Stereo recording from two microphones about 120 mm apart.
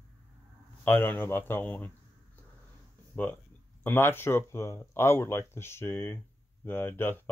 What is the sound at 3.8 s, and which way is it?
Speech, 15° left (ahead or behind).